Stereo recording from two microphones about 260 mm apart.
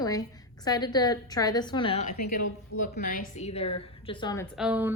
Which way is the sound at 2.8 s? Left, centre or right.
Left.